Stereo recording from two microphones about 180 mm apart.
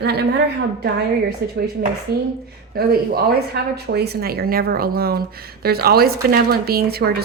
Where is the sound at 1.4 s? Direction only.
60° right (ahead or behind).